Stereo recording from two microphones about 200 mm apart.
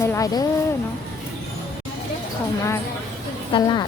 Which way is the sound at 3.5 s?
20° left (ahead or behind).